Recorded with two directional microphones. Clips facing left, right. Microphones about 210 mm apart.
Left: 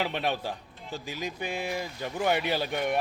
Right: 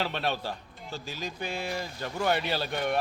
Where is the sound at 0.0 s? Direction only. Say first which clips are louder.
Left 1 dB; 15° left (ahead or behind).